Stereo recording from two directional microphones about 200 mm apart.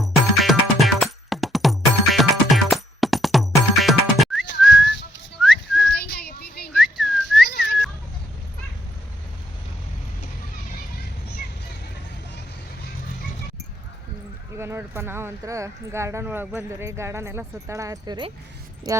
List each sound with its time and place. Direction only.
0.0 s music: centre (ahead or behind)
5.4 s whistling: centre (ahead or behind)
5.9 s a sound: 55° left (ahead or behind)
6.7 s whistling: centre (ahead or behind)
7.5 s goat: 55° left (ahead or behind)
14.6 s speech: 10° right (ahead or behind)